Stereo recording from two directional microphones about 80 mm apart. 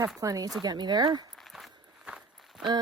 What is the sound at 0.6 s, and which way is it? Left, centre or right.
Speech, right.